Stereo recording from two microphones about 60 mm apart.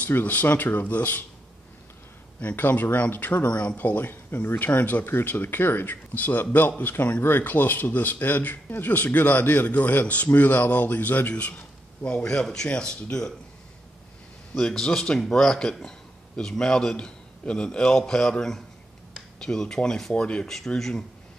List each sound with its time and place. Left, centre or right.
0.0 s speech: left
2.5 s a man's voice: left; by 13.3 s centre
14.5 s a man's voice: centre
20.5 s a man's voice: centre